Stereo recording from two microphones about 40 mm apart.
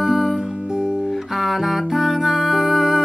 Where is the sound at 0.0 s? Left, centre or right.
Centre.